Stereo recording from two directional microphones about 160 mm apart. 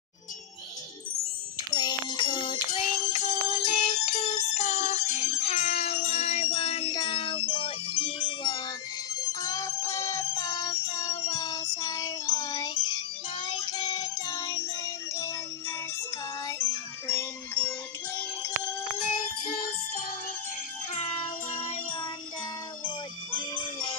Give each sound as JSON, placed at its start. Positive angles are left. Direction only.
{"t": 1.7, "sound": "music", "side_deg": 25}
{"t": 9.3, "sound": "music", "side_deg": 20}
{"t": 16.4, "sound": "music", "side_deg": 15}
{"t": 20.9, "sound": "music", "side_deg": 40}